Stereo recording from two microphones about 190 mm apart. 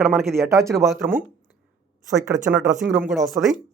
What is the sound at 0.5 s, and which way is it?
Speech, 15° right (ahead or behind).